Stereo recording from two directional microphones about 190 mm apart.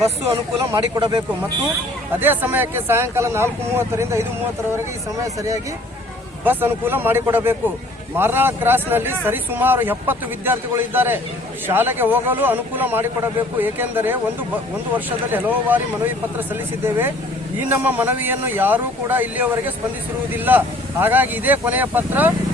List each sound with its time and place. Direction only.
0.6 s speech: 15° right (ahead or behind)
2.1 s speech: 10° right (ahead or behind)